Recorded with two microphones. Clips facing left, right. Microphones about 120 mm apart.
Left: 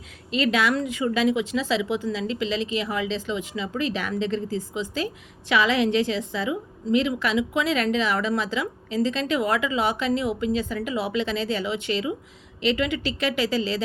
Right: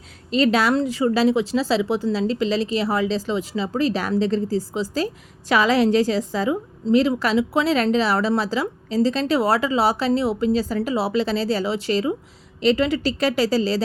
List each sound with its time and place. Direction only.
0.3 s a woman's voice: 35° right (ahead or behind)